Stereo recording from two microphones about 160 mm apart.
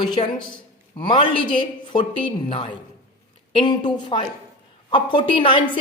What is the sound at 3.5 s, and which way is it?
A man's voice, 30° left (ahead or behind).